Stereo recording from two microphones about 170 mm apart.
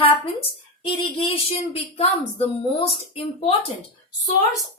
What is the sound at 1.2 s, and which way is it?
Speech, 35° left (ahead or behind).